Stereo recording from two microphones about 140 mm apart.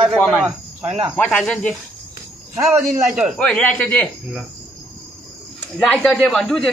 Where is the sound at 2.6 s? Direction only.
5° right (ahead or behind).